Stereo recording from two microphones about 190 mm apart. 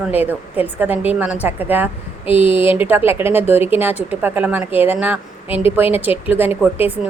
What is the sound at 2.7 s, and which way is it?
A woman's voice, 10° right (ahead or behind).